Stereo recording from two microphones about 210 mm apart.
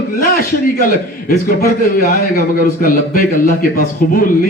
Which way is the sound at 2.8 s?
40° left (ahead or behind).